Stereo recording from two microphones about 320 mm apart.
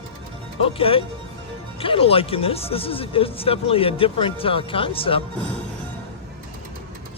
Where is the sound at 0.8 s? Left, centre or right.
Centre.